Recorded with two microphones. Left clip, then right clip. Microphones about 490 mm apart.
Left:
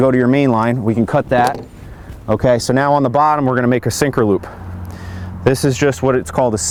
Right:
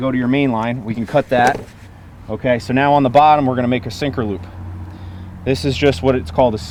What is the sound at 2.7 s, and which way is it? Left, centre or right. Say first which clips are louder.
Speech: even; left.